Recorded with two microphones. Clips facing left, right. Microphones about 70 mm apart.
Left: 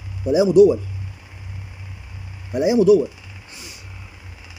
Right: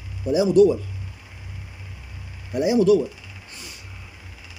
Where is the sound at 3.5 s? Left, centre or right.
Centre.